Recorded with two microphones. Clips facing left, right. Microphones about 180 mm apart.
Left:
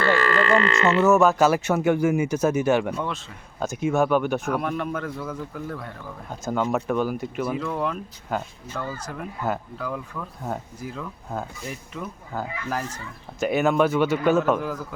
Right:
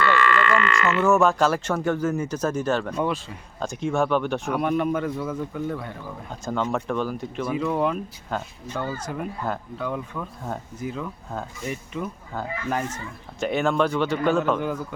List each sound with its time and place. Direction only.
0.0 s a sound: 35° left (ahead or behind)
1.0 s speech: centre (ahead or behind)
7.5 s speech: 5° right (ahead or behind)
8.3 s speech: 5° left (ahead or behind)